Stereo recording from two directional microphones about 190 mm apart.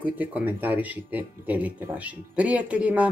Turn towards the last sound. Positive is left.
turn(degrees=-5)  # may be behind; listen again after turning